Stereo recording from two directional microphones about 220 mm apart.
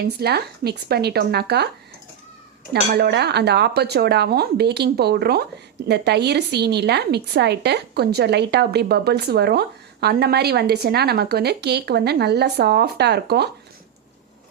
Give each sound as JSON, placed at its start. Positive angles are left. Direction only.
{"t": 0.0, "sound": "a woman's voice", "side_deg": -45}
{"t": 2.7, "sound": "a woman's voice", "side_deg": -45}